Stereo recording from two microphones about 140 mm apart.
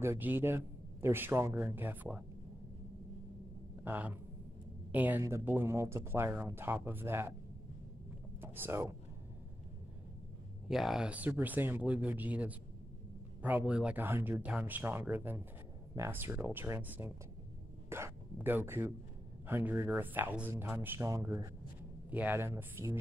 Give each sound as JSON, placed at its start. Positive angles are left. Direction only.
{"t": 0.0, "sound": "speech", "side_deg": -15}
{"t": 3.8, "sound": "speech", "side_deg": -15}
{"t": 8.4, "sound": "a sound", "side_deg": -15}
{"t": 10.7, "sound": "speech", "side_deg": 0}